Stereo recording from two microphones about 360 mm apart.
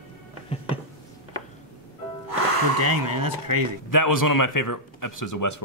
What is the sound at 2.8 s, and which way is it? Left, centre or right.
Speech, right.